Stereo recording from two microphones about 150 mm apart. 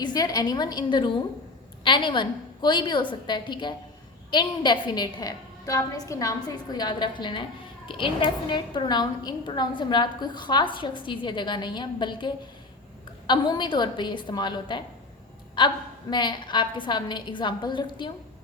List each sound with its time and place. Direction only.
0.0 s a woman's voice: 25° left (ahead or behind)